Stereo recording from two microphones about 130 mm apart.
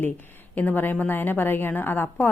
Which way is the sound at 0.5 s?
15° left (ahead or behind).